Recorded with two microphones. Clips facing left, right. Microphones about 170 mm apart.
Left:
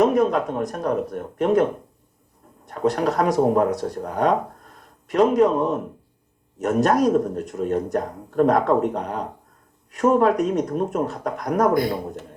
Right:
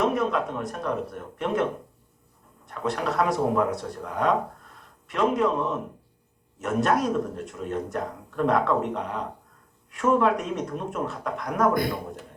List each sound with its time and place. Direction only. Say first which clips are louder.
0.0 s speech: left 6 dB; 40° left (ahead or behind)
2.6 s speech: left 7 dB; 40° left (ahead or behind)